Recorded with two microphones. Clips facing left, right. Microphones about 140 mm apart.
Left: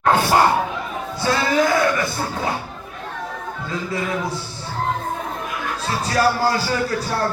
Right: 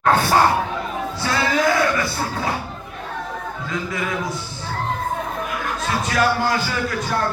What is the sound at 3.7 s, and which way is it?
Speech, 30° left (ahead or behind).